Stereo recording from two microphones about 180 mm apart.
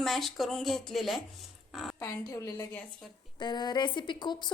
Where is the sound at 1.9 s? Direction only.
20° left (ahead or behind).